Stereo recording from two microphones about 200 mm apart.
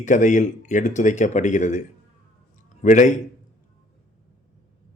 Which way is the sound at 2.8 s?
40° left (ahead or behind).